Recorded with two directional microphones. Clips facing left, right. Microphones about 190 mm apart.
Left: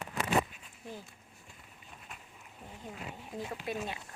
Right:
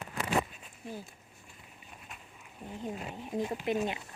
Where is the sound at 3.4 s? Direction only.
20° right (ahead or behind).